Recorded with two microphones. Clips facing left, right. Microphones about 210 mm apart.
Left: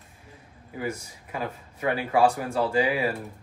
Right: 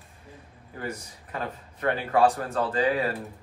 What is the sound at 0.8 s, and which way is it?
Speech, 10° left (ahead or behind).